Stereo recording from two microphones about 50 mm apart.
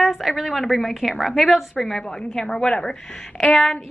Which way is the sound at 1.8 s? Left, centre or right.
Centre.